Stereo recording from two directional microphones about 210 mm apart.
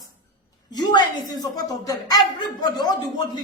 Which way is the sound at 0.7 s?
20° left (ahead or behind).